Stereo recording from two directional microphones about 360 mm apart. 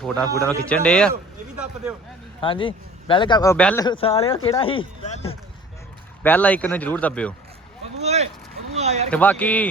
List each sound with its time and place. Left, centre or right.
0.0 s speech: centre
2.4 s speech: centre
6.2 s speech: centre
8.0 s vehicle: centre
8.7 s a sound: centre
9.0 s speech: centre